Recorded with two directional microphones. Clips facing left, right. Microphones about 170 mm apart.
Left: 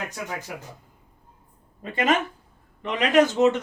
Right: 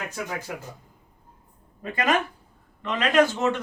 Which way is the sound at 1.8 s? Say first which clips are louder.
Left 1 dB; 25° left (ahead or behind).